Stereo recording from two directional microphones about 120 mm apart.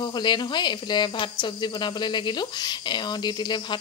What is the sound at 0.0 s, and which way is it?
Speech, 40° left (ahead or behind).